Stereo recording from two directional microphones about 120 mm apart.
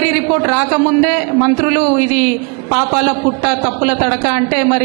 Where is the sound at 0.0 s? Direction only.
15° right (ahead or behind).